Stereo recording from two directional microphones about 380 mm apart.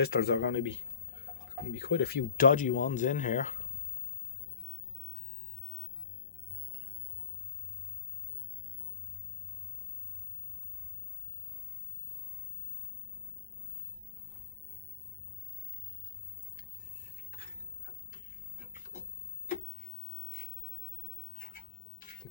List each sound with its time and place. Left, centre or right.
0.0 s speech: left